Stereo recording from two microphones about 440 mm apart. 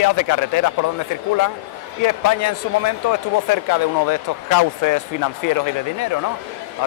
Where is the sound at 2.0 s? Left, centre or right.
Left.